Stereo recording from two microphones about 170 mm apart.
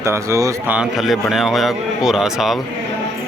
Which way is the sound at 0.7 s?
5° right (ahead or behind).